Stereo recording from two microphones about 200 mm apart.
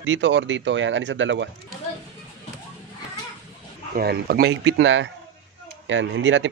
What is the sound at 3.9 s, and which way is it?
Speech, 50° right (ahead or behind).